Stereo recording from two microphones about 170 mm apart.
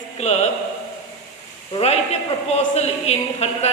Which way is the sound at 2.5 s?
40° left (ahead or behind).